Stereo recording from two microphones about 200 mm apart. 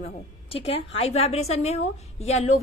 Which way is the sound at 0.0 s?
30° left (ahead or behind).